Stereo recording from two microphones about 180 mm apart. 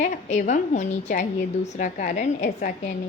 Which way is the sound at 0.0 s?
45° left (ahead or behind).